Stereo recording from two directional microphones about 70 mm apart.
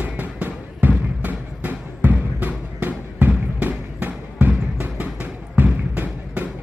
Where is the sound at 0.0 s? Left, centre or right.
Right.